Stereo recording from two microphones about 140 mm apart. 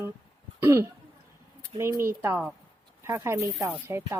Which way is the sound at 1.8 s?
20° right (ahead or behind).